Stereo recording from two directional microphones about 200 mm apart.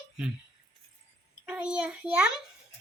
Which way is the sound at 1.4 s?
5° right (ahead or behind).